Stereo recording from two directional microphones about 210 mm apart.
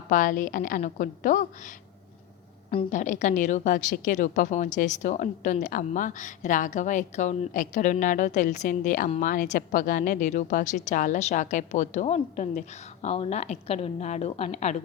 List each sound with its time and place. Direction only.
0.1 s a woman's voice: 40° left (ahead or behind)